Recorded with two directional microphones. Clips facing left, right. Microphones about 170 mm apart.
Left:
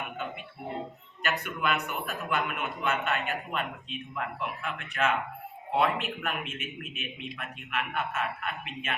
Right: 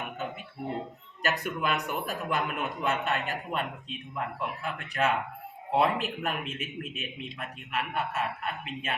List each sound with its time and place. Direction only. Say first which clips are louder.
1.2 s a man's voice: right 1 dB; 35° right (ahead or behind)